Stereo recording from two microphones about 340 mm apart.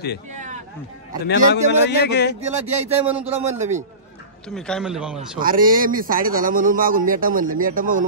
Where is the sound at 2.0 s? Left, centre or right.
Left.